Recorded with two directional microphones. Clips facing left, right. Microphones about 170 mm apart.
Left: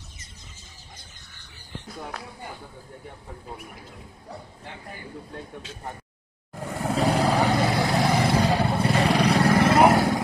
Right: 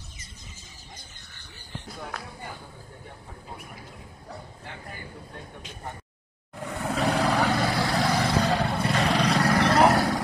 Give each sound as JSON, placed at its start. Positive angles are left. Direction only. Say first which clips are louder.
{"t": 6.8, "sound": "vehicle", "louder": "left 3 dB", "side_deg": 30}
{"t": 7.2, "sound": "vehicle", "louder": "left 1 dB", "side_deg": 20}
{"t": 8.7, "sound": "wild animals", "louder": "left 3 dB", "side_deg": 30}
{"t": 9.0, "sound": "wild animals", "louder": "left 2 dB", "side_deg": 10}
{"t": 9.3, "sound": "vehicle", "louder": "left 3 dB", "side_deg": 30}